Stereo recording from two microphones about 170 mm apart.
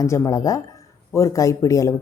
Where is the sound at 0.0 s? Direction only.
20° left (ahead or behind).